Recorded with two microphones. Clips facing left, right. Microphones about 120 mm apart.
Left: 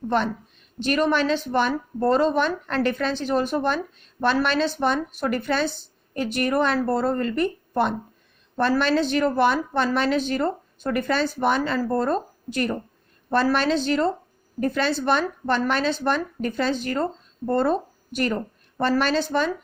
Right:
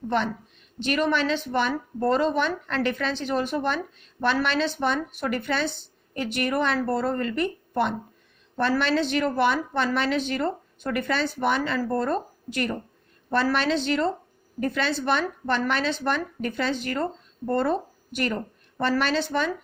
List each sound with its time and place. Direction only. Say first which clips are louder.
0.8 s a woman's voice: left 3 dB; 40° left (ahead or behind)